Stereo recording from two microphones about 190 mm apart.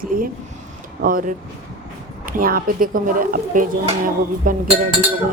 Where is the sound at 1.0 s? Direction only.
45° right (ahead or behind).